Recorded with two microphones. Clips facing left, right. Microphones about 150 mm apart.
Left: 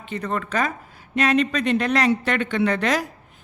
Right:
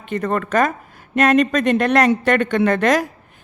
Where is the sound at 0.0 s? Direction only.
50° right (ahead or behind).